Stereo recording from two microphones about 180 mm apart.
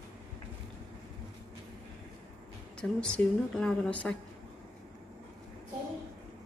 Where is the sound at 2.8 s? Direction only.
5° left (ahead or behind).